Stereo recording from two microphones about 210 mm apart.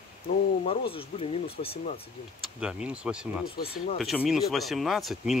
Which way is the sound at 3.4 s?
45° left (ahead or behind).